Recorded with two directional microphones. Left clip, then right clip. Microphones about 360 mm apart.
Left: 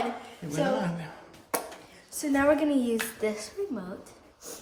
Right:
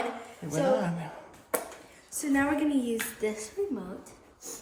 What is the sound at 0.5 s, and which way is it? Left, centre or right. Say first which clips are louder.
Speech: right 2 dB; centre.